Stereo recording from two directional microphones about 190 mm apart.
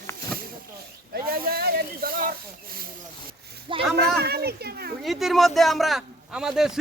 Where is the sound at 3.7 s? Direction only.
25° right (ahead or behind).